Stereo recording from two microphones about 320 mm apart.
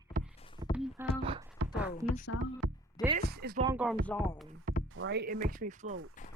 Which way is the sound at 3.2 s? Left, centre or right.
Right.